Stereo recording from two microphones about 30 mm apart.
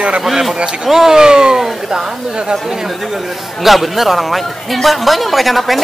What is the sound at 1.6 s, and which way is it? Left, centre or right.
Speech, centre.